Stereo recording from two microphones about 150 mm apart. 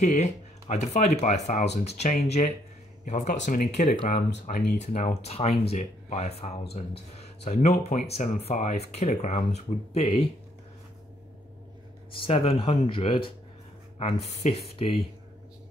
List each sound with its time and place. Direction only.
0.0 s speech: 50° left (ahead or behind)
4.7 s speech: 50° left (ahead or behind)
12.2 s speech: 40° left (ahead or behind)